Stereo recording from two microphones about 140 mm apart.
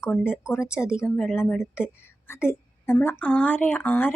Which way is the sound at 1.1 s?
5° left (ahead or behind).